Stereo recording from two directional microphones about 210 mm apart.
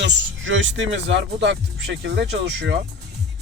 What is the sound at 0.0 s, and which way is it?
Speech, 65° right (ahead or behind).